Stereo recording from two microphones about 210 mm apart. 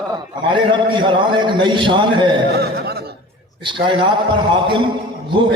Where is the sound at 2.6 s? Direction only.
50° right (ahead or behind).